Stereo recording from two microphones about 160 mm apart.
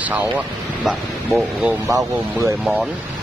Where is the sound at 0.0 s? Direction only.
10° right (ahead or behind).